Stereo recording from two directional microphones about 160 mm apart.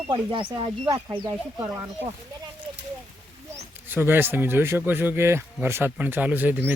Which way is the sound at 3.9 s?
15° right (ahead or behind).